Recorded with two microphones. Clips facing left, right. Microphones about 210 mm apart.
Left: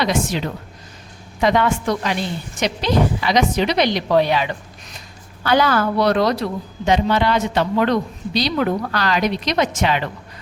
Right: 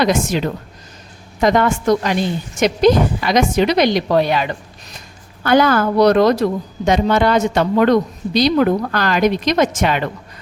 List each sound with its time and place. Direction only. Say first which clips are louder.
0.0 s speech: right 4 dB; 45° right (ahead or behind)